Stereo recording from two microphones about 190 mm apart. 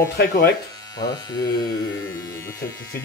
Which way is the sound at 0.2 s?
50° left (ahead or behind).